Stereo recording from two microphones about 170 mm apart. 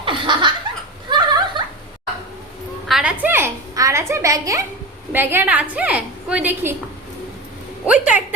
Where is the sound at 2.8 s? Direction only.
5° right (ahead or behind).